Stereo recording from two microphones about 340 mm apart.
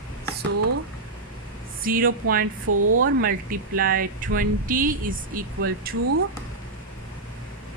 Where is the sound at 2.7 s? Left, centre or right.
Right.